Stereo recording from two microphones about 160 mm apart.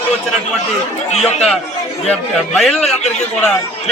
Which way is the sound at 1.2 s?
5° left (ahead or behind).